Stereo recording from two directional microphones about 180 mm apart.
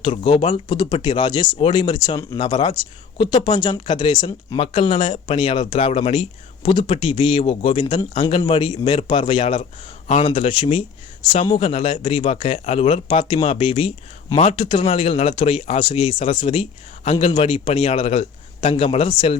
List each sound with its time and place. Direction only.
0.0 s speech: 30° left (ahead or behind)